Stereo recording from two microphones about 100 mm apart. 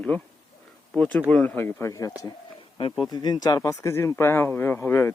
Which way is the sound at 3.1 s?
40° left (ahead or behind).